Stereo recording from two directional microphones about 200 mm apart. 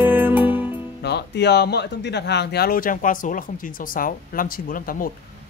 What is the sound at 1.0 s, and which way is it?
Speech, 55° left (ahead or behind).